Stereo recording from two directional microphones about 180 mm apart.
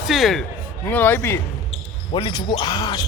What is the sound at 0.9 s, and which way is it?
Speech, 10° left (ahead or behind).